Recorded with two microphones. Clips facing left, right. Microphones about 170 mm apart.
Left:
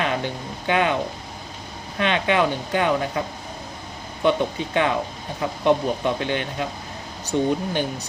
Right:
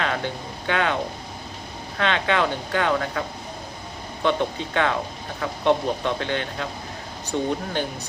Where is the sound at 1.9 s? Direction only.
15° left (ahead or behind).